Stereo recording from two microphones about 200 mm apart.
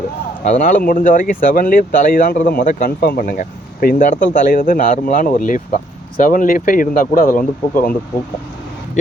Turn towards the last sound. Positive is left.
turn(degrees=45)  # may be behind; listen again after turning